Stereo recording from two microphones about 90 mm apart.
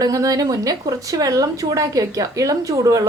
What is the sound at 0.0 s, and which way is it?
Speech, 40° right (ahead or behind).